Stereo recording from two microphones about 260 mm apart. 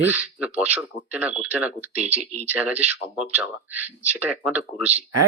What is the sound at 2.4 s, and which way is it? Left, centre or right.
Speech, centre.